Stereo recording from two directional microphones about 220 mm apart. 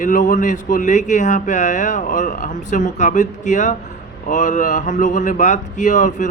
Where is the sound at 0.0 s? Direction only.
35° left (ahead or behind).